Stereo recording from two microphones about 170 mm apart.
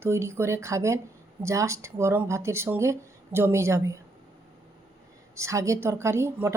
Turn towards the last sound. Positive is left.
turn(degrees=-15)  # may be behind; listen again after turning